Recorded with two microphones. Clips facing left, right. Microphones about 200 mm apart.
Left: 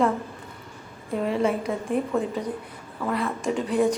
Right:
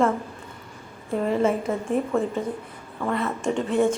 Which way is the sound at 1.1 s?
Centre (ahead or behind).